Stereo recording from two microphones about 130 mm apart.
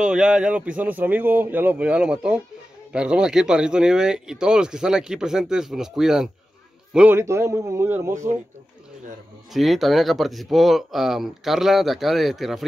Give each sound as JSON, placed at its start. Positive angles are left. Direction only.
{"t": 0.0, "sound": "a man's voice", "side_deg": -5}
{"t": 7.2, "sound": "speech", "side_deg": -20}
{"t": 9.5, "sound": "speech", "side_deg": 0}